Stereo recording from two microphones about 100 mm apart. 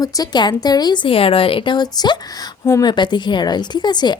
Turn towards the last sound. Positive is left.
turn(degrees=45)  # may be behind; listen again after turning